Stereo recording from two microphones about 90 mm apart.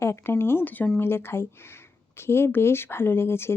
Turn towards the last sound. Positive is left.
turn(degrees=25)  # may be behind; listen again after turning